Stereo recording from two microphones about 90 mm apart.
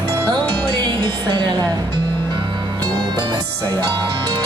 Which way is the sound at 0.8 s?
60° right (ahead or behind).